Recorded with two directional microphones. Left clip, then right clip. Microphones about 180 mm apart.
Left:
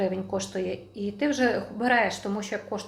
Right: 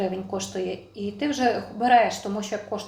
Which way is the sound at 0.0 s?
20° left (ahead or behind).